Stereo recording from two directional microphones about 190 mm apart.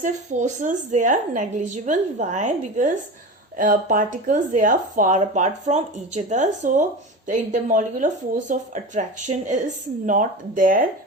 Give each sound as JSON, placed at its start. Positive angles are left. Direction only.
{"t": 0.0, "sound": "a woman's voice", "side_deg": -40}